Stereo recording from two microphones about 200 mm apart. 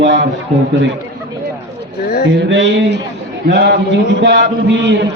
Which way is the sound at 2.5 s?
60° right (ahead or behind).